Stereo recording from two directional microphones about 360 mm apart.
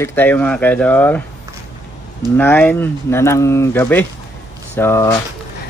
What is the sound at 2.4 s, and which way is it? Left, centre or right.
Speech, centre.